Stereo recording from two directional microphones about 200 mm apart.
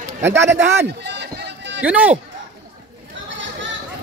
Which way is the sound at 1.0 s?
55° right (ahead or behind).